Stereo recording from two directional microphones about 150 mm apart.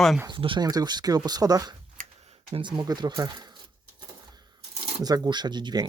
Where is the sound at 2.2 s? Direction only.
40° right (ahead or behind).